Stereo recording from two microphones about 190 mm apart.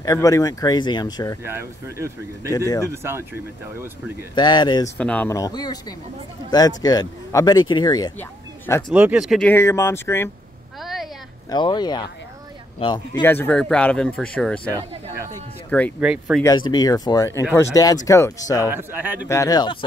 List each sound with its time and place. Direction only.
0.0 s speech: 20° left (ahead or behind)
1.4 s speech: 15° right (ahead or behind)
4.4 s speech: 20° left (ahead or behind)
4.9 s speech: 5° left (ahead or behind)
8.9 s speech: 5° right (ahead or behind)
9.5 s speech: 15° left (ahead or behind)
10.8 s a sound: centre (ahead or behind)
11.5 s speech: 25° left (ahead or behind)
13.2 s speech: 10° left (ahead or behind)
14.7 s speech: 20° right (ahead or behind)
16.0 s speech: 5° right (ahead or behind)
16.4 s speech: 20° left (ahead or behind)
18.7 s speech: 10° right (ahead or behind)
19.2 s speech: 15° left (ahead or behind)